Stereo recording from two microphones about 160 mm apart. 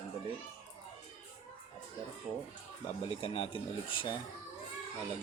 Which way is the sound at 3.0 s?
35° left (ahead or behind).